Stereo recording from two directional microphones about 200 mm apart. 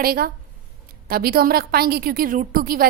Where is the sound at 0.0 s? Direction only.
45° right (ahead or behind).